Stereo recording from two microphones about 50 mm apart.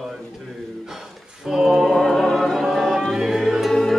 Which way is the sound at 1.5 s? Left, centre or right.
Centre.